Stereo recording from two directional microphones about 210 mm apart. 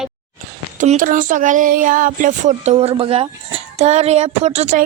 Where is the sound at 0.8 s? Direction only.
40° right (ahead or behind).